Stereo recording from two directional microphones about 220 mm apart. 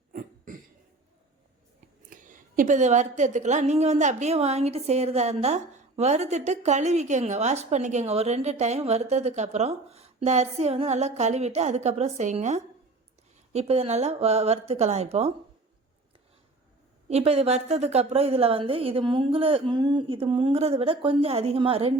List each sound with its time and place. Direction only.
0.1 s throat clearing: 40° right (ahead or behind)
2.0 s a woman's voice: 35° right (ahead or behind)
17.1 s a woman's voice: 30° right (ahead or behind)